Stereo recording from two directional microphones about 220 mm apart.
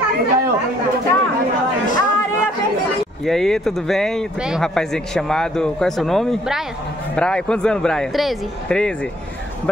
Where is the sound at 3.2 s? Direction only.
Centre (ahead or behind).